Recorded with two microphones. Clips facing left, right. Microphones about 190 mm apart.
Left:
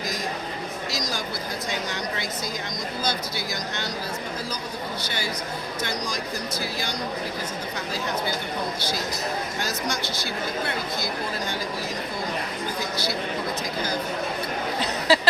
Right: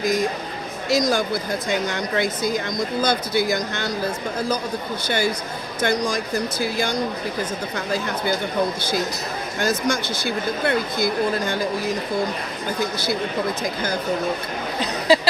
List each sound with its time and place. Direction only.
0.9 s a woman's voice: 55° right (ahead or behind)
9.6 s a woman's voice: 50° right (ahead or behind)
12.8 s a woman's voice: 50° right (ahead or behind)
14.8 s a sound: 15° right (ahead or behind)